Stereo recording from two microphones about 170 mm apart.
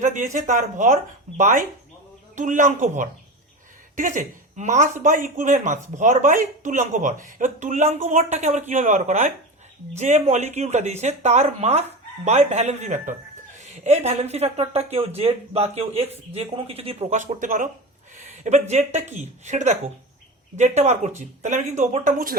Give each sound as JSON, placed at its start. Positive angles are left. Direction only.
{"t": 0.0, "sound": "speech", "side_deg": -45}